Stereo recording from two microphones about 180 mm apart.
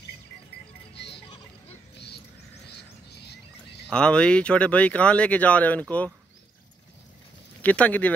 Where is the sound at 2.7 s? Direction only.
65° left (ahead or behind).